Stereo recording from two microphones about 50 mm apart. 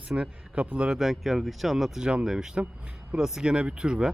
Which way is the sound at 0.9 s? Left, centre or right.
Centre.